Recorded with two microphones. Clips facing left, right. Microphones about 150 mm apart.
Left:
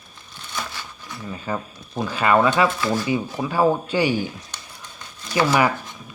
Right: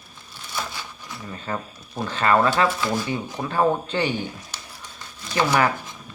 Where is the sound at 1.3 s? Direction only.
10° left (ahead or behind).